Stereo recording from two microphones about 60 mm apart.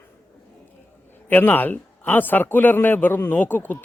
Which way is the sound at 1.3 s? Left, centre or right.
Left.